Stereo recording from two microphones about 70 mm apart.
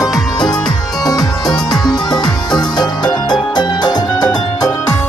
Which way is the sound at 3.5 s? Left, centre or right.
Left.